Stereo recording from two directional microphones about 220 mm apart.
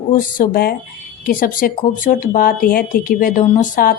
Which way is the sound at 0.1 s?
40° left (ahead or behind).